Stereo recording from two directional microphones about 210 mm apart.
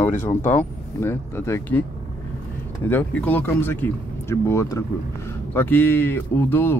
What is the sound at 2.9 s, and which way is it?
Speech, 10° left (ahead or behind).